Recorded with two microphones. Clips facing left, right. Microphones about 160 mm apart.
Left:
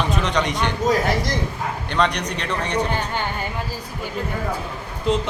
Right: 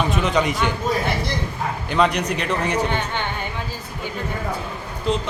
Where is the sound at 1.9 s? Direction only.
5° right (ahead or behind).